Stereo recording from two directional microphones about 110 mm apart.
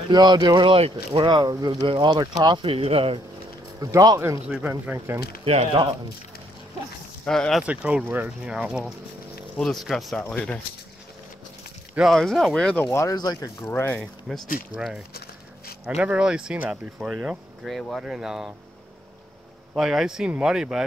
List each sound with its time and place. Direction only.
0.1 s speech: 40° right (ahead or behind); by 3.2 s 60° right (ahead or behind)
3.8 s speech: 35° right (ahead or behind)
4.5 s speech: 10° right (ahead or behind)
4.9 s speech: 25° right (ahead or behind)
5.4 s speech: 65° right (ahead or behind)
7.2 s speech: 5° left (ahead or behind)
7.6 s speech: 10° right (ahead or behind)
10.3 s speech: 10° left (ahead or behind)
12.0 s speech: centre (ahead or behind)
12.9 s speech: 30° left (ahead or behind)
14.3 s speech: 5° right (ahead or behind)
17.1 s speech: 5° right (ahead or behind)
19.7 s speech: 5° right (ahead or behind)